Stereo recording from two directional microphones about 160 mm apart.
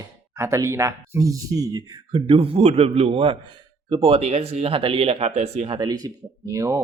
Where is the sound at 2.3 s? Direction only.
35° right (ahead or behind).